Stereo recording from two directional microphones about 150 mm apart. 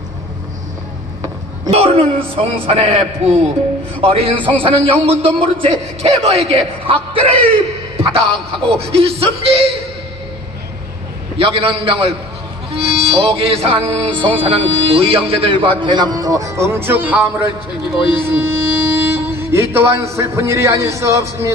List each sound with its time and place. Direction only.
1.7 s music: 40° right (ahead or behind)
4.4 s a man's voice: 10° left (ahead or behind)
4.6 s music: 40° right (ahead or behind)
5.2 s a man's voice: 40° right (ahead or behind)
8.0 s music: 40° right (ahead or behind)
11.3 s music: 35° right (ahead or behind); by 17.5 s 15° right (ahead or behind)
17.9 s speech: 10° right (ahead or behind)